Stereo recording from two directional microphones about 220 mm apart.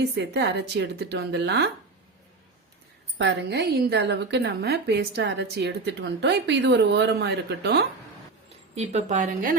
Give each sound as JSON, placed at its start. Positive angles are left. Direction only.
{"t": 0.0, "sound": "a woman's voice", "side_deg": -50}
{"t": 3.2, "sound": "a woman's voice", "side_deg": -50}
{"t": 8.7, "sound": "a woman's voice", "side_deg": -30}